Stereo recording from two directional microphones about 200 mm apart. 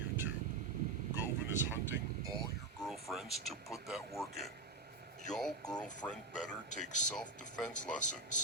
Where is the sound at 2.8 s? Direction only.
Centre (ahead or behind).